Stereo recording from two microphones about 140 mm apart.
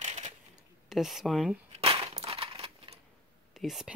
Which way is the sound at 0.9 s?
Centre (ahead or behind).